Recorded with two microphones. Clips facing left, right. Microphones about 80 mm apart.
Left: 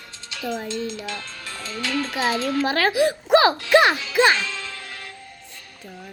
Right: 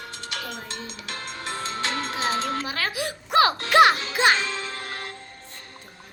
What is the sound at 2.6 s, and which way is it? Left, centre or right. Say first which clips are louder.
Speech: left 9 dB; left.